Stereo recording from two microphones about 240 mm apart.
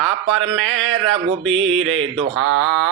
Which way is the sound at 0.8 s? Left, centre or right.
Right.